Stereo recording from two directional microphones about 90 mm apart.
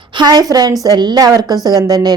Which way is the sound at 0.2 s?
50° right (ahead or behind).